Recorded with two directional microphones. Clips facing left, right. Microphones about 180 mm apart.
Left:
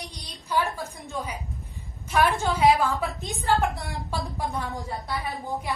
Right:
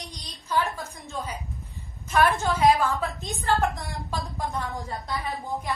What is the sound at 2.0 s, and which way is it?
A woman's voice, 15° left (ahead or behind).